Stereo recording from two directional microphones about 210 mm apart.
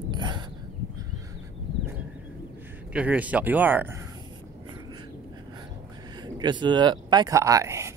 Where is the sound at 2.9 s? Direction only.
5° right (ahead or behind).